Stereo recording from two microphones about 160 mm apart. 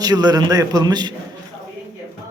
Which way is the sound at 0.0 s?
25° right (ahead or behind).